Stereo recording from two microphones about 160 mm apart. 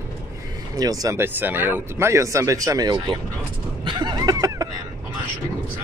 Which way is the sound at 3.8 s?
25° right (ahead or behind).